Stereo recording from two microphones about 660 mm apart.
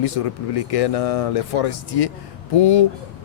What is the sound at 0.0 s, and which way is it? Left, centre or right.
Speech, left.